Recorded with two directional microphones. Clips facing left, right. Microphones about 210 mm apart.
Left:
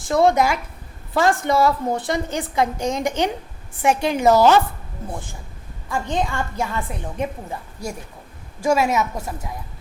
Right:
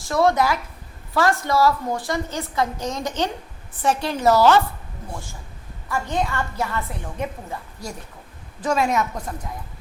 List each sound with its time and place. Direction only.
0.1 s a woman's voice: 20° left (ahead or behind)
5.9 s a woman's voice: 15° left (ahead or behind)
8.6 s a woman's voice: 10° left (ahead or behind)